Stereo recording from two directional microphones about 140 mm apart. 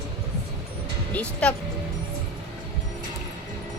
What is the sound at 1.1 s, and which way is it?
Speech, 10° left (ahead or behind).